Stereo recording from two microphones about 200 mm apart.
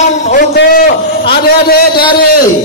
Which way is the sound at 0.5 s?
50° left (ahead or behind).